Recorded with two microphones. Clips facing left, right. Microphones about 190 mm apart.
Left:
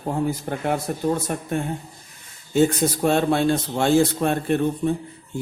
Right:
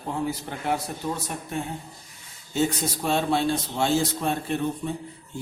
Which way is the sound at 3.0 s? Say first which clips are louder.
Left 4 dB; 55° left (ahead or behind).